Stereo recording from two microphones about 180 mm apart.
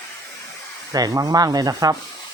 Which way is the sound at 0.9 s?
20° right (ahead or behind).